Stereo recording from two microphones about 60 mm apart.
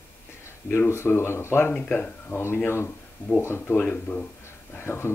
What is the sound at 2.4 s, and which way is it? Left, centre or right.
Speech, left.